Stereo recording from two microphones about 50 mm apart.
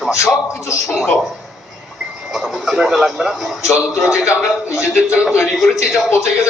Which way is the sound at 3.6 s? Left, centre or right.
Left.